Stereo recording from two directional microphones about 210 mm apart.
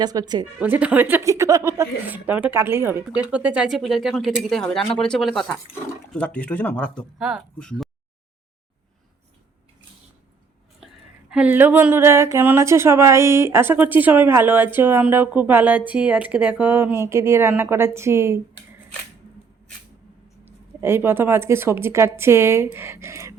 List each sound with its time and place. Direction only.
0.0 s speech: 20° right (ahead or behind)
0.6 s speech: 5° right (ahead or behind)
11.3 s speech: 5° right (ahead or behind)
20.4 s speech: 10° right (ahead or behind)